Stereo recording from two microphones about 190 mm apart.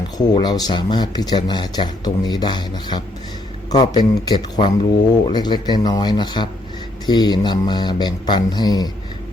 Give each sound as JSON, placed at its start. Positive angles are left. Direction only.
{"t": 0.2, "sound": "speech", "side_deg": 20}